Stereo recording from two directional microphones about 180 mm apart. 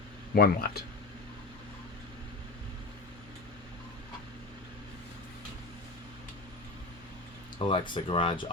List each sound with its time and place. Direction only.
0.3 s speech: 60° left (ahead or behind)
7.6 s speech: 30° left (ahead or behind)